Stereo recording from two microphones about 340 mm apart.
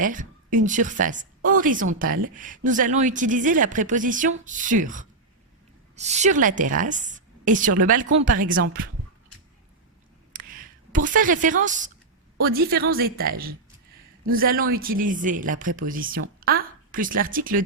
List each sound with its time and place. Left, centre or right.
0.0 s a woman's voice: right
10.3 s a sound: right
12.4 s a woman's voice: right